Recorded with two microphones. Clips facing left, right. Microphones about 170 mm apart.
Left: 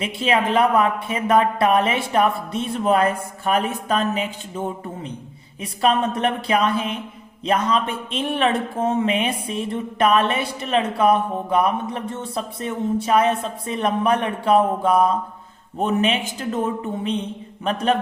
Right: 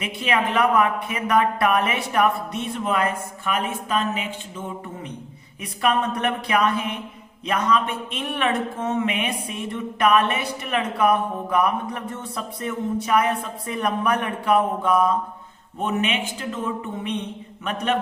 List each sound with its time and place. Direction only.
0.0 s speech: 30° left (ahead or behind)
5.6 s speech: 30° left (ahead or behind)